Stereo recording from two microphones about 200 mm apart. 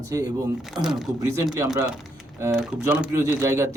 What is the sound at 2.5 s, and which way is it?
Speech, 5° right (ahead or behind).